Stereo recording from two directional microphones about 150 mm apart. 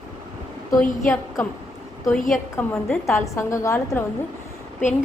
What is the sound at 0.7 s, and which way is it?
Speech, 60° left (ahead or behind).